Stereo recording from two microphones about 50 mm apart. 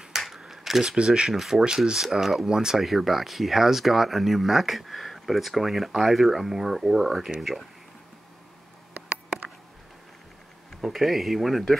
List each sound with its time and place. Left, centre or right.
0.1 s camera: centre
0.9 s speech: centre
1.3 s speech: centre
10.7 s speech: centre